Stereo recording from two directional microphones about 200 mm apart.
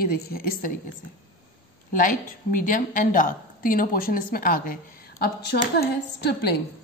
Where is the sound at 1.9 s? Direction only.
40° left (ahead or behind).